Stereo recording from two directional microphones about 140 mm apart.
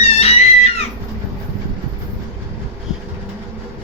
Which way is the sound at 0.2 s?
45° left (ahead or behind).